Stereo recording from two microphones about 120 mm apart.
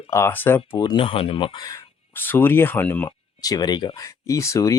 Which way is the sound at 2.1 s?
15° left (ahead or behind).